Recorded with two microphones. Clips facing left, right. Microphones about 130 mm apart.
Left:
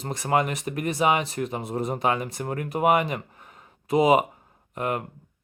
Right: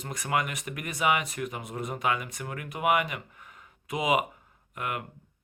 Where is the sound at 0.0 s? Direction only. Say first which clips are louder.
Left 6 dB; 30° left (ahead or behind).